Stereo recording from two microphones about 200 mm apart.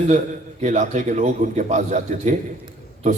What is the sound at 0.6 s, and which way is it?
A man's voice, 40° right (ahead or behind).